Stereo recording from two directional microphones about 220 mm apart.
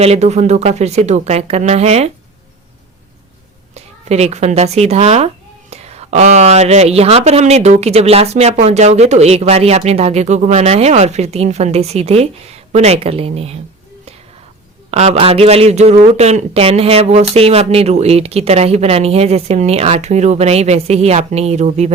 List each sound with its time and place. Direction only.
0.0 s speech: 30° right (ahead or behind)
3.8 s speech: 30° right (ahead or behind)
14.8 s speech: 30° right (ahead or behind)